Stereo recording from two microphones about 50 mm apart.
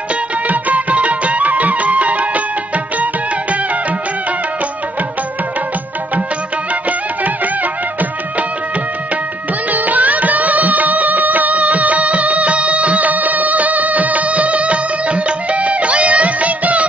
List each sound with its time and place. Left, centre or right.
0.1 s music: right
6.7 s music: right
9.7 s music: right